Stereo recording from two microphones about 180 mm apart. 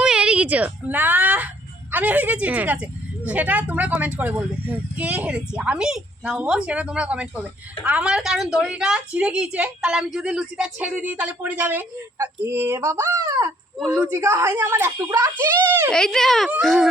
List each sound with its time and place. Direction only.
0.0 s a woman's voice: 5° right (ahead or behind)
15.9 s a child's voice: 5° left (ahead or behind)